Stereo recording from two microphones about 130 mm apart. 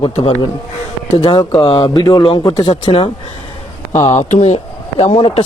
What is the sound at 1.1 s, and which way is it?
Speech, 35° left (ahead or behind).